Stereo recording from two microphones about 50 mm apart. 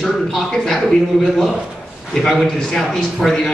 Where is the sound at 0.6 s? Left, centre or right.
Centre.